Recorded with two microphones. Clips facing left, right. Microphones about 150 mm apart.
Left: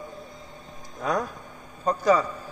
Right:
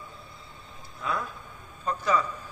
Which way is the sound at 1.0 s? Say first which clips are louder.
Left 5 dB; 40° left (ahead or behind).